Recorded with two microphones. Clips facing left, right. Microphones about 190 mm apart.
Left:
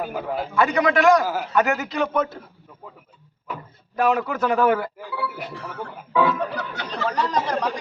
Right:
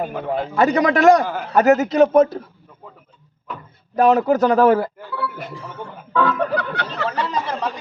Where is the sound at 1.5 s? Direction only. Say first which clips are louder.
Right 9 dB; 40° right (ahead or behind).